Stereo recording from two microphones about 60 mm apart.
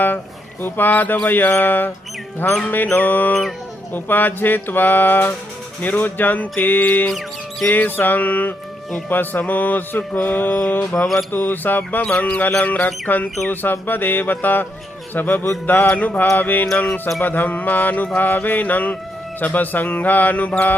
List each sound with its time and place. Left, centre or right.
0.6 s mantra: left
12.0 s speech: left
13.5 s mantra: left
16.7 s speech: left
17.2 s mantra: left
18.3 s speech: left